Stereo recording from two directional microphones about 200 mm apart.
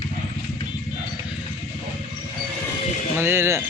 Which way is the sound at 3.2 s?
10° right (ahead or behind).